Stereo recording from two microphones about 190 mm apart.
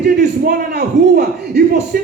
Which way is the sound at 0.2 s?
55° right (ahead or behind).